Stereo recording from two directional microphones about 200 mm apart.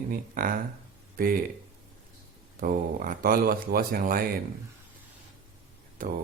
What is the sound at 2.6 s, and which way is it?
Speech, 45° right (ahead or behind).